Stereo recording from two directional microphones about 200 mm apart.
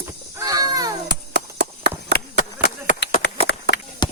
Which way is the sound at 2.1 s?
50° left (ahead or behind).